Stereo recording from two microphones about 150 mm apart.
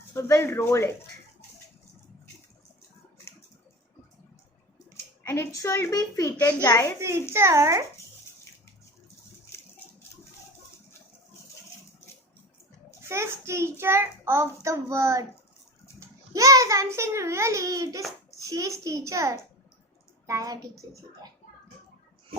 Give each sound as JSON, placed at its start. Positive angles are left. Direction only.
{"t": 0.1, "sound": "speech", "side_deg": 15}
{"t": 5.2, "sound": "a woman's voice", "side_deg": 15}
{"t": 7.3, "sound": "a child's voice", "side_deg": -20}
{"t": 13.1, "sound": "a child's voice", "side_deg": -20}